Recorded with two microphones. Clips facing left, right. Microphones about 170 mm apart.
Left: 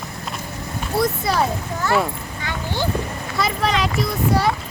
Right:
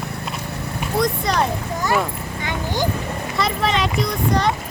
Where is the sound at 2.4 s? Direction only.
15° right (ahead or behind).